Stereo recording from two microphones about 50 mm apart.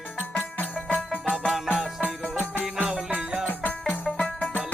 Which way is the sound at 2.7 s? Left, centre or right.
Centre.